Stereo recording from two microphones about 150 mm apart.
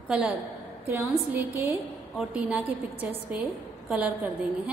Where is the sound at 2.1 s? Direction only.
10° right (ahead or behind).